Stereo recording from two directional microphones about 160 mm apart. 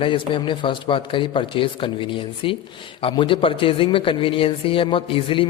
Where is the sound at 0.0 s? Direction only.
30° left (ahead or behind).